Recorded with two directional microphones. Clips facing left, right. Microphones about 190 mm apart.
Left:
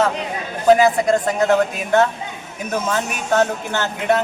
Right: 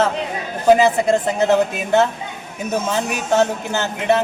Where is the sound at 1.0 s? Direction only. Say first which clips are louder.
Even; 25° right (ahead or behind).